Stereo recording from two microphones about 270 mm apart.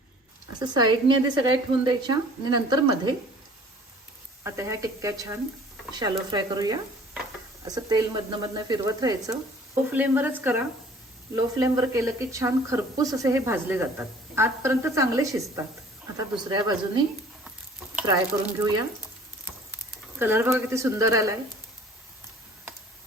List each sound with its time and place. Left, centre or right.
0.6 s speech: centre
4.4 s speech: centre
18.0 s speech: centre